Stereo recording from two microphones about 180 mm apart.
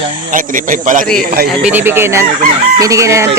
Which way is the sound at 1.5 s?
10° right (ahead or behind).